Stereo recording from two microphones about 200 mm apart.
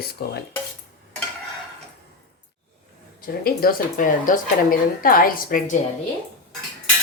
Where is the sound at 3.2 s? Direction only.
45° left (ahead or behind).